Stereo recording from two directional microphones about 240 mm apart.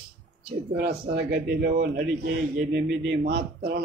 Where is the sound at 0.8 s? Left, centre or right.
Right.